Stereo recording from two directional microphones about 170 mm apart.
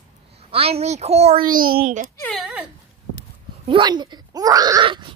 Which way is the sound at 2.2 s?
Centre (ahead or behind).